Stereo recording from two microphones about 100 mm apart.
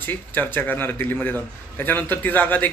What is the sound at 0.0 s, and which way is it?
A man's voice, 20° left (ahead or behind).